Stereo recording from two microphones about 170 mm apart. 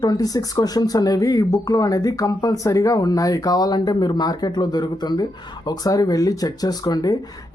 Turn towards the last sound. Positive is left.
turn(degrees=25)  # may be behind; listen again after turning